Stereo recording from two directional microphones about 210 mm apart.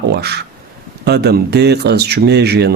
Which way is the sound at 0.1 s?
50° right (ahead or behind).